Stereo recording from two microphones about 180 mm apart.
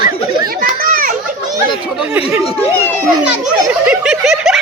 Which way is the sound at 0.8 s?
55° right (ahead or behind).